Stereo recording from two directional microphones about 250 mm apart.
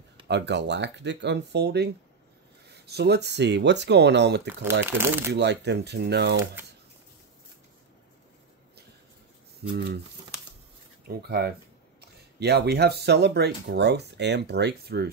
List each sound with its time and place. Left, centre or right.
0.3 s speech: right
4.8 s speech: centre
5.3 s speech: right
11.1 s speech: right